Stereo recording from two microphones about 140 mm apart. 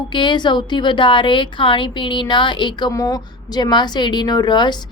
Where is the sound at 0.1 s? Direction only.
35° left (ahead or behind).